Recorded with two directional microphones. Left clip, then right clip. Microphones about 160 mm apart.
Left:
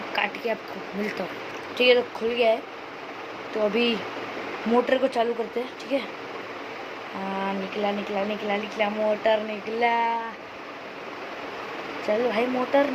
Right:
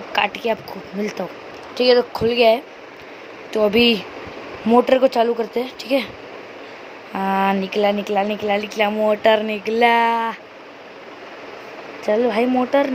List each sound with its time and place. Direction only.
0.1 s a sound: 55° right (ahead or behind)
1.8 s speech: 45° right (ahead or behind); by 3.9 s 60° right (ahead or behind)
4.7 s speech: 45° right (ahead or behind)
7.3 s speech: 90° right
12.0 s speech: 75° right (ahead or behind)